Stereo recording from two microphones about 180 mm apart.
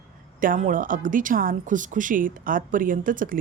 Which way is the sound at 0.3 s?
45° right (ahead or behind).